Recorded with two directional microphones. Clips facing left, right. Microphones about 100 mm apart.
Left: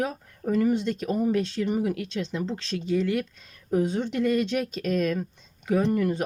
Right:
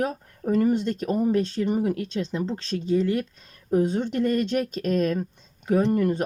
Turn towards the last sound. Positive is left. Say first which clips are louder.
# right 2 dB
turn(degrees=-40)  # may be behind; listen again after turning